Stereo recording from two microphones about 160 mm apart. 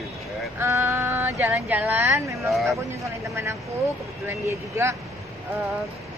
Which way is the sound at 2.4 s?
Centre (ahead or behind).